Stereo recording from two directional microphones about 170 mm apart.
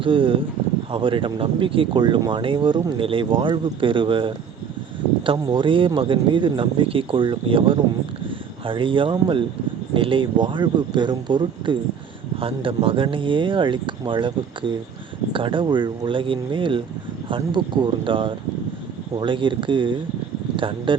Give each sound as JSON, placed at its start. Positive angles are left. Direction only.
{"t": 0.0, "sound": "speech", "side_deg": -30}